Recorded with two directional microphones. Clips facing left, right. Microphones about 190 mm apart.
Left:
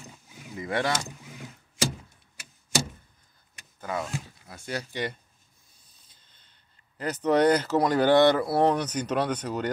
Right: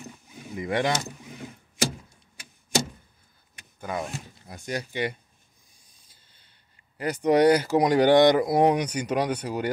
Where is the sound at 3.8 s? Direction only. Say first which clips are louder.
Even; 15° right (ahead or behind).